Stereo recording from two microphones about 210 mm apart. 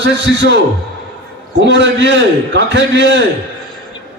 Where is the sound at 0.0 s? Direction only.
60° right (ahead or behind).